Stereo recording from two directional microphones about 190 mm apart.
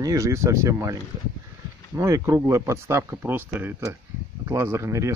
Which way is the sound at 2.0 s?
15° right (ahead or behind).